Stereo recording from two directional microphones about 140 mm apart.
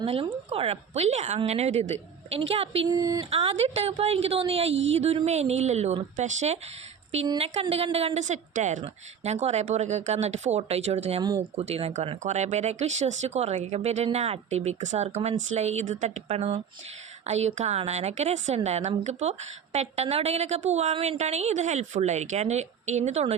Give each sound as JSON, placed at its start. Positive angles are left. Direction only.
{"t": 0.0, "sound": "speech", "side_deg": -45}
{"t": 2.9, "sound": "a sound", "side_deg": -25}
{"t": 3.2, "sound": "speech", "side_deg": -45}
{"t": 7.3, "sound": "speech", "side_deg": -45}
{"t": 11.2, "sound": "a sound", "side_deg": -30}
{"t": 11.5, "sound": "speech", "side_deg": -45}